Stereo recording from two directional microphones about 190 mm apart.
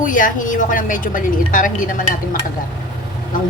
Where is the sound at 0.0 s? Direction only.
45° left (ahead or behind).